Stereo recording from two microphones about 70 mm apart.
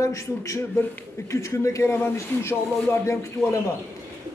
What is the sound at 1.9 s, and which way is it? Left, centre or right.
Speech, left.